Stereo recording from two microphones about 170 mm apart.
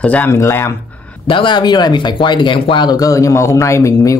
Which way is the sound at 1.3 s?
30° left (ahead or behind).